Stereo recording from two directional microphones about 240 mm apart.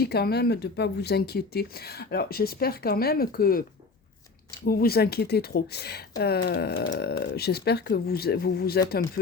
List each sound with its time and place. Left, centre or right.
0.0 s speech: left
4.6 s speech: left